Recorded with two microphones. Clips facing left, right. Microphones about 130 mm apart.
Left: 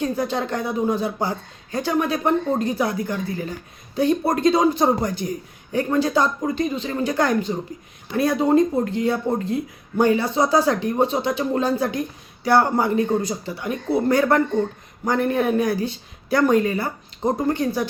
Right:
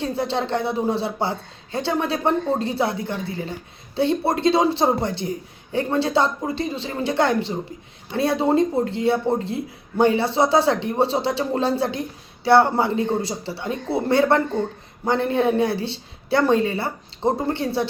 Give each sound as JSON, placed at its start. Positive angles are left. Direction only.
{"t": 0.0, "sound": "a woman's voice", "side_deg": -25}